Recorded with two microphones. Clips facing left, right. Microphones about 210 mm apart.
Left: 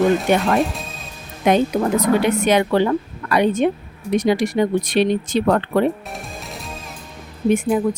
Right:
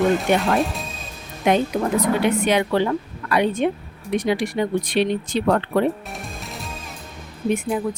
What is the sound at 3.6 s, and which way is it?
Speech, 45° left (ahead or behind).